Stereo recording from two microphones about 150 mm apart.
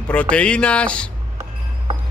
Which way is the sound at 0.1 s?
10° left (ahead or behind).